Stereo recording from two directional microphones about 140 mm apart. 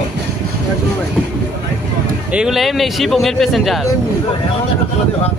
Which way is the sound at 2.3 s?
Centre (ahead or behind).